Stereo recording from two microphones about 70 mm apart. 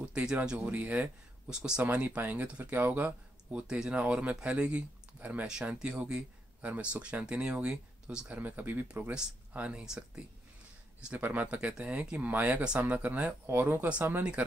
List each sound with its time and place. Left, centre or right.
0.0 s speech: centre
3.6 s speech: centre
8.4 s speech: right
11.1 s speech: right
13.8 s speech: centre